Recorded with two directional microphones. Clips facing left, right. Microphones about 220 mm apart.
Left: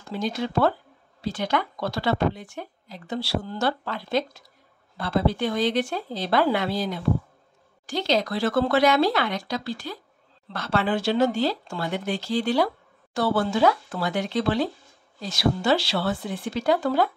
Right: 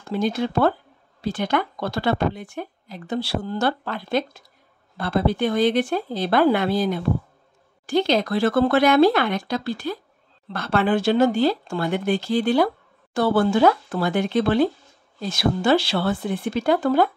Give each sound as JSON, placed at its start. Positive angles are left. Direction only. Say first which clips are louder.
{"t": 0.1, "sound": "speech", "louder": "right 4 dB", "side_deg": -55}